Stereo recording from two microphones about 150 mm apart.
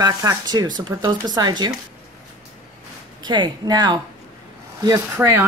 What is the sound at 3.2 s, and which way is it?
Speech, 30° right (ahead or behind).